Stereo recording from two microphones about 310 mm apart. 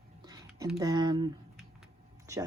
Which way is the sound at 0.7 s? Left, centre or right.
Centre.